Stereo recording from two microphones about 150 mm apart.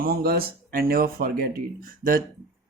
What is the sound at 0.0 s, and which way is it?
Speech, 90° right.